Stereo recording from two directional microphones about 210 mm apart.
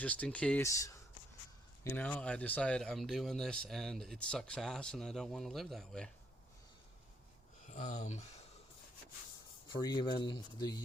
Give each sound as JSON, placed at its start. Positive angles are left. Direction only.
{"t": 0.0, "sound": "speech", "side_deg": 5}
{"t": 7.7, "sound": "speech", "side_deg": 35}
{"t": 9.6, "sound": "speech", "side_deg": 20}